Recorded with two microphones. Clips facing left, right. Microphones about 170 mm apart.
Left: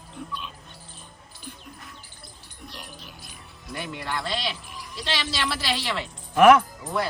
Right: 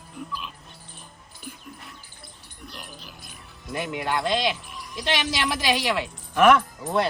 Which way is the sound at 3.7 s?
20° right (ahead or behind).